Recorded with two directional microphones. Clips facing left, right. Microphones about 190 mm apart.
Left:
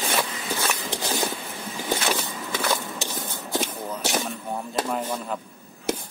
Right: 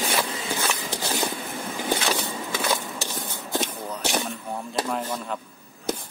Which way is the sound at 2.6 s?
10° right (ahead or behind).